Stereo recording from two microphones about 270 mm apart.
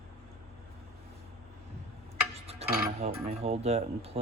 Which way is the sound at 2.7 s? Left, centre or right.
Right.